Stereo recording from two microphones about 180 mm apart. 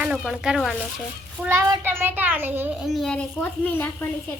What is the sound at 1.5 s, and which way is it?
A child's voice, 15° right (ahead or behind).